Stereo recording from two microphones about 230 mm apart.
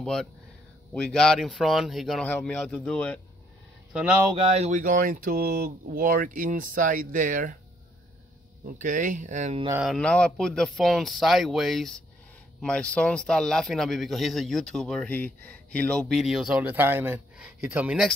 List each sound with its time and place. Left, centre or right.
0.0 s speech: centre
3.9 s speech: centre
4.4 s speech: right
8.6 s speech: right
9.7 s speech: centre